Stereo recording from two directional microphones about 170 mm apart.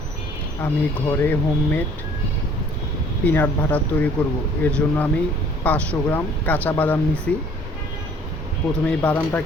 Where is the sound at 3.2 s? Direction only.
10° left (ahead or behind).